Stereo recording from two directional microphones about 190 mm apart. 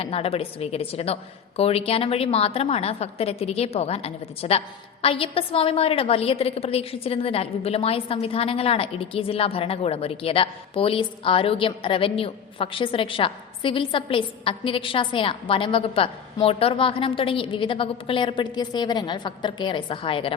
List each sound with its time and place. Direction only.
0.0 s a woman's voice: 30° left (ahead or behind)